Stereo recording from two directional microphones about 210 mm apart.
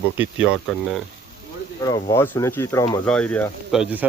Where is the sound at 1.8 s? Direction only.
15° left (ahead or behind).